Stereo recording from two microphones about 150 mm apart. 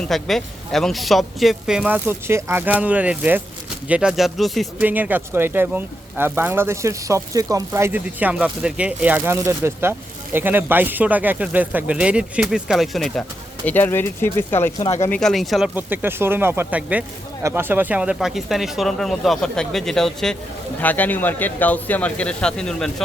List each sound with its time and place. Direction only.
0.1 s speech: centre (ahead or behind)
4.8 s speech: 10° right (ahead or behind)
13.7 s speech: 15° left (ahead or behind)
15.1 s speech: 5° left (ahead or behind)
15.7 s speech: 10° right (ahead or behind); by 23.0 s 5° left (ahead or behind)